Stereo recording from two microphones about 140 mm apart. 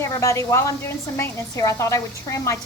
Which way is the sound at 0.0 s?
20° left (ahead or behind).